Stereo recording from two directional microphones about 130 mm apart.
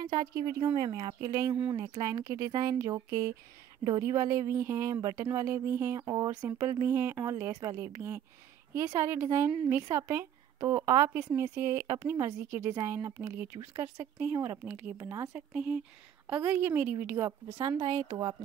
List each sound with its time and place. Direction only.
0.0 s a woman's voice: 30° right (ahead or behind)
15.3 s a woman's voice: 10° right (ahead or behind)
17.6 s a woman's voice: 30° right (ahead or behind)